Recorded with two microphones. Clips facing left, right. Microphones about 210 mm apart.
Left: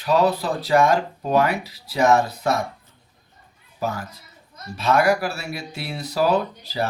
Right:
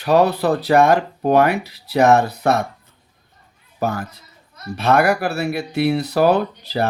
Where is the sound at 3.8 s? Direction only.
55° right (ahead or behind).